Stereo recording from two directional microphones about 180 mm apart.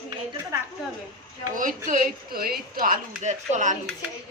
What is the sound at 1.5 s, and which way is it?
Speech, 45° right (ahead or behind).